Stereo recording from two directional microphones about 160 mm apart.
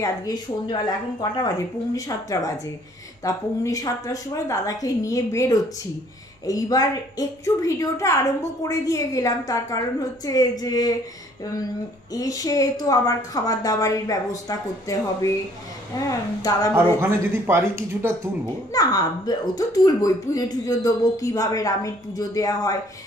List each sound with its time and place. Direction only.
0.0 s a woman's voice: 25° left (ahead or behind)
12.1 s a woman's voice: 20° left (ahead or behind)
16.7 s speech: 15° right (ahead or behind)
18.7 s a woman's voice: 20° left (ahead or behind)